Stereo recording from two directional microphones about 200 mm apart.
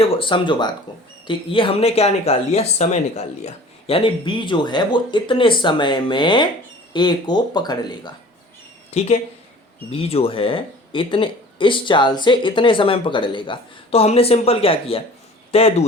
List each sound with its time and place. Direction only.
0.0 s speech: 25° left (ahead or behind)
8.9 s speech: 30° left (ahead or behind)